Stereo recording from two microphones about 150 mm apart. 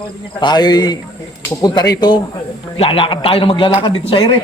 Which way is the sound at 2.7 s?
40° left (ahead or behind).